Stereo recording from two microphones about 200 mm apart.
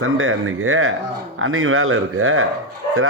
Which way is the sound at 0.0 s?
90° right.